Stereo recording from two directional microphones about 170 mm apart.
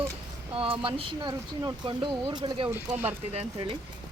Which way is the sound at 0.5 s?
35° right (ahead or behind).